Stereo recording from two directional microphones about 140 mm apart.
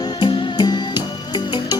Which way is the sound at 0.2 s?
35° left (ahead or behind).